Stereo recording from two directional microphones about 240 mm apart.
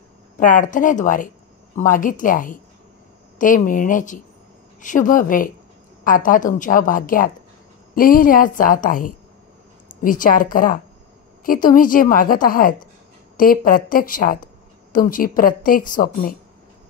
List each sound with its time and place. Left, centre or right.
0.4 s speech: left